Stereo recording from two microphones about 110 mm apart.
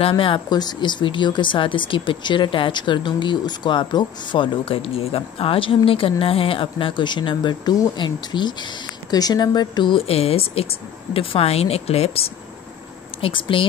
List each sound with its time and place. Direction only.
0.1 s speech: 45° left (ahead or behind); by 12.3 s 65° left (ahead or behind)
13.2 s speech: 50° left (ahead or behind)